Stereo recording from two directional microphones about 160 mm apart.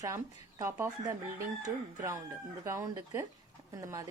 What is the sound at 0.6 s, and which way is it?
Speech, 20° right (ahead or behind).